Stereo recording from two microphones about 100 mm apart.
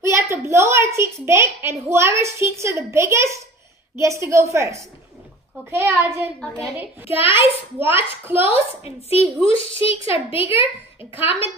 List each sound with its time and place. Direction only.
0.0 s a child's voice: 30° right (ahead or behind)
7.1 s a child's voice: 65° left (ahead or behind)
7.3 s a child's voice: 20° right (ahead or behind)
8.5 s speech: 80° left; by 10.4 s 65° left (ahead or behind)
11.0 s a child's voice: 20° right (ahead or behind)